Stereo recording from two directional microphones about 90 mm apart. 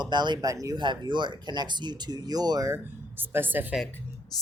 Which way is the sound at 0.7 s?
60° right (ahead or behind).